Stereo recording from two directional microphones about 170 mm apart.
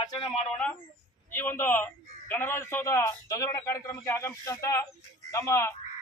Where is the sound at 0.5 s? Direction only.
10° left (ahead or behind).